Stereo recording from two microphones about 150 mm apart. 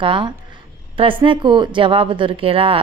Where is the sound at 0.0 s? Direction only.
35° right (ahead or behind).